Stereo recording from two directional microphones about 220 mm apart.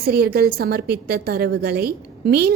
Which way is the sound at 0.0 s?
45° right (ahead or behind).